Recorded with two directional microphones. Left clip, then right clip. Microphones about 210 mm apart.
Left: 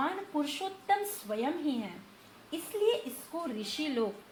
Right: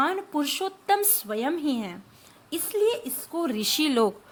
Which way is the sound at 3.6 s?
45° right (ahead or behind).